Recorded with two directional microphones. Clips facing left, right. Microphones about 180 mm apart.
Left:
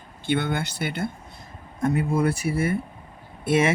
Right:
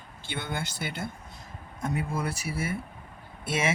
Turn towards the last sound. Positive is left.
turn(degrees=55)  # may be behind; listen again after turning